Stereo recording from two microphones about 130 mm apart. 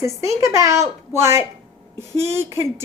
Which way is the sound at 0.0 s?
25° right (ahead or behind).